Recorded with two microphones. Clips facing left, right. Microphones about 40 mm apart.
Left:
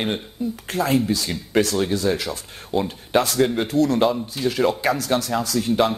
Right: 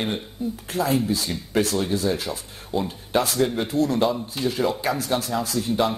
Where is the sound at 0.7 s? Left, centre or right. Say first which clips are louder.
Left 2 dB; left.